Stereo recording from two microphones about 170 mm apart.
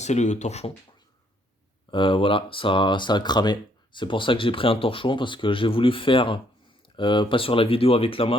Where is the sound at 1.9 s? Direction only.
30° left (ahead or behind).